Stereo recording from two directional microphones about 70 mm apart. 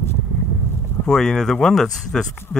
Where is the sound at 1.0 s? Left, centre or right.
Centre.